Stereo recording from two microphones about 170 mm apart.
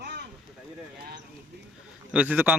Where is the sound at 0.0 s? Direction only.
75° right (ahead or behind).